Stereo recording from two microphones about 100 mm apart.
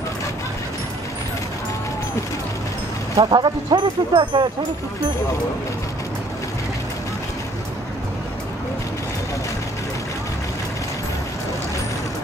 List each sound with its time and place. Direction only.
3.2 s speech: 45° right (ahead or behind)